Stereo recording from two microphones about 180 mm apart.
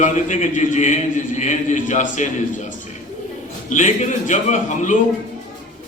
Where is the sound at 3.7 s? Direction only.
45° left (ahead or behind).